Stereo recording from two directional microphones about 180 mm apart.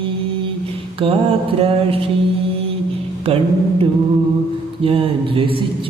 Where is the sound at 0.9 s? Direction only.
30° right (ahead or behind).